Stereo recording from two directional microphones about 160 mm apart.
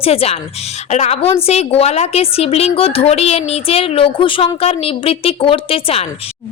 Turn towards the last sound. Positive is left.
turn(degrees=35)  # may be behind; listen again after turning